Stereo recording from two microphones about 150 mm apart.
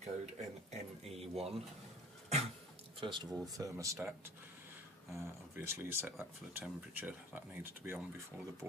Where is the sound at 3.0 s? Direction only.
30° right (ahead or behind).